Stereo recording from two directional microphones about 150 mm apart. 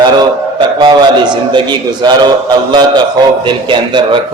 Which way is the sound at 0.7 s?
30° right (ahead or behind).